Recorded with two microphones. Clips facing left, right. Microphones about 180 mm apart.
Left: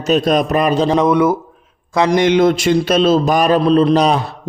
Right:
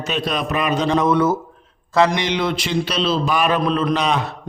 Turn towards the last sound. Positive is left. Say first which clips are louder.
# left 6 dB
turn(degrees=35)  # may be behind; listen again after turning